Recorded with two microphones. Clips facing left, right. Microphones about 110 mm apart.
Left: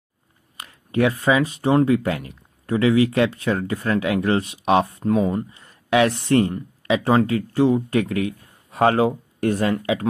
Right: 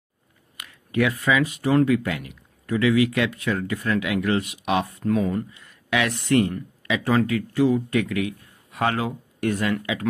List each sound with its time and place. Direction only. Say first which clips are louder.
0.6 s speech: left 3 dB; 35° left (ahead or behind)